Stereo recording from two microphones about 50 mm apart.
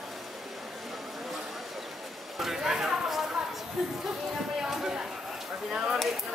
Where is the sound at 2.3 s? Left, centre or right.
Centre.